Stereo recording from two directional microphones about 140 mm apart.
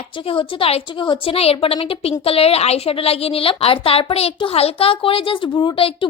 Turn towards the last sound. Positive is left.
turn(degrees=40)  # may be behind; listen again after turning